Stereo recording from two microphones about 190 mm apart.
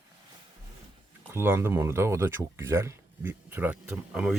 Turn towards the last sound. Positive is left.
turn(degrees=-5)  # may be behind; listen again after turning